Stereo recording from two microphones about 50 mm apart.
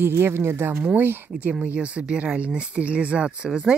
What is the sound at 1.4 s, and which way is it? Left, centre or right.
Speech, right.